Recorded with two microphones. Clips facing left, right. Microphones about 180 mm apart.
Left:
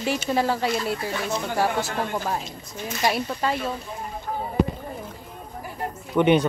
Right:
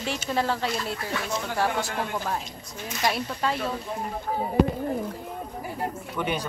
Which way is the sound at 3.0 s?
Centre (ahead or behind).